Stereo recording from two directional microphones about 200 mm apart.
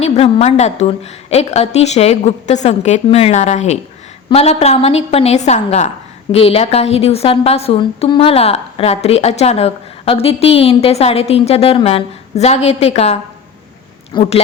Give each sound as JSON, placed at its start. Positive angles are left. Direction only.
{"t": 0.0, "sound": "a woman's voice", "side_deg": 30}